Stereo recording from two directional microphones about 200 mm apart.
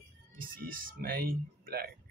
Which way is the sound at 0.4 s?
45° right (ahead or behind).